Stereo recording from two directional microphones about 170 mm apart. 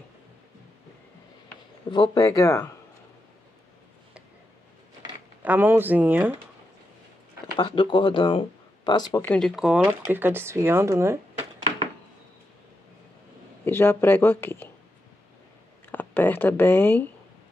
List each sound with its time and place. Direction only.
1.9 s speech: 25° left (ahead or behind)
5.4 s speech: 10° right (ahead or behind)
7.5 s speech: 30° left (ahead or behind)
9.2 s speech: 10° left (ahead or behind)
9.6 s speech: 5° right (ahead or behind)
13.7 s speech: 15° left (ahead or behind)
15.9 s speech: 10° left (ahead or behind)